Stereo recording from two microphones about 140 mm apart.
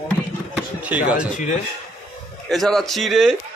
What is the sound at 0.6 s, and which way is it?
Speech, 10° right (ahead or behind).